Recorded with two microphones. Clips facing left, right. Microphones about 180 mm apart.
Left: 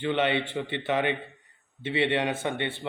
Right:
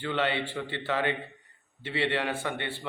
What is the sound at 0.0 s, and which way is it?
A man's voice, 20° left (ahead or behind).